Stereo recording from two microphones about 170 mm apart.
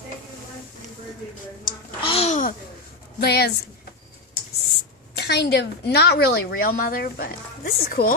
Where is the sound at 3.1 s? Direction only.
70° left (ahead or behind).